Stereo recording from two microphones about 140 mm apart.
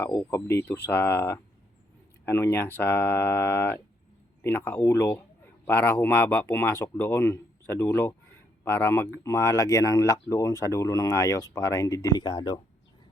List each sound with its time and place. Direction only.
0.0 s a man's voice: 20° left (ahead or behind)